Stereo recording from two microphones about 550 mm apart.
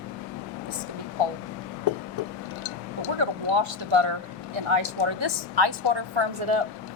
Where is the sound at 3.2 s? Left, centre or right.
Right.